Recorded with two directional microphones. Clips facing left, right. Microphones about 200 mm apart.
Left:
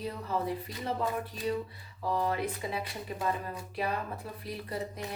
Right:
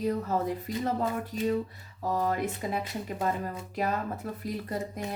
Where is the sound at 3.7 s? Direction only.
45° right (ahead or behind).